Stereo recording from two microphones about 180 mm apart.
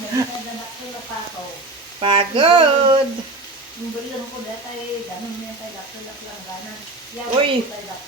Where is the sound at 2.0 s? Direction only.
30° right (ahead or behind).